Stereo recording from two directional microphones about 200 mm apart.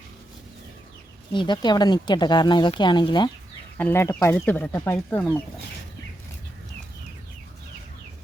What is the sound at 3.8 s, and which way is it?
Speech, 10° left (ahead or behind).